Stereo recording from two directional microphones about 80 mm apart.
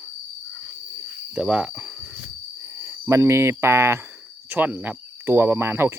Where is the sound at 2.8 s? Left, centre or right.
Right.